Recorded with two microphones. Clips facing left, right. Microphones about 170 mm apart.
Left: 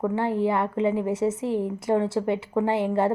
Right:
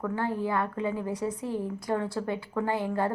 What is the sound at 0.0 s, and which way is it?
Speech, 25° left (ahead or behind).